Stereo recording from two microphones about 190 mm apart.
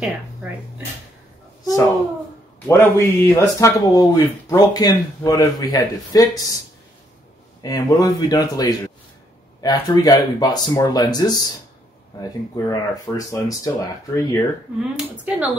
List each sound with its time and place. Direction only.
0.0 s speech: 5° right (ahead or behind)
1.6 s speech: 20° left (ahead or behind)
7.6 s speech: 20° left (ahead or behind)
15.2 s speech: 5° right (ahead or behind)